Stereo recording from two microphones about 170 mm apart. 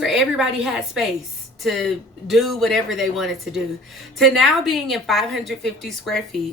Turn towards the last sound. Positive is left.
turn(degrees=0)  # may be behind; listen again after turning